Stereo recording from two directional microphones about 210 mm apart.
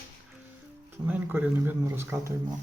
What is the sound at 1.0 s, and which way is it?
Speech, 10° right (ahead or behind).